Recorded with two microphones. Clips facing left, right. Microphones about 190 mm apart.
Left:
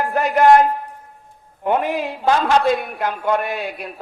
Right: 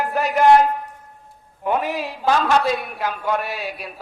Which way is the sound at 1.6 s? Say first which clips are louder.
Left 3 dB; 55° left (ahead or behind).